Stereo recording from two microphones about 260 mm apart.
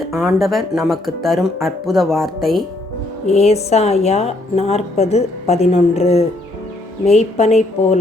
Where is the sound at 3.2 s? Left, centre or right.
Left.